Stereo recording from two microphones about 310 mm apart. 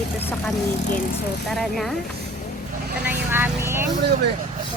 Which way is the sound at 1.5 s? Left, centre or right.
Centre.